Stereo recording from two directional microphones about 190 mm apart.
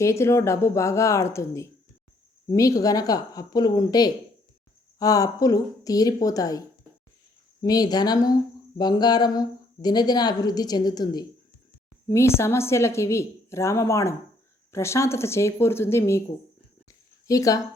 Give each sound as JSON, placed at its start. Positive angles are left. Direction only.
{"t": 0.0, "sound": "a woman's voice", "side_deg": 15}
{"t": 17.2, "sound": "a woman's voice", "side_deg": 15}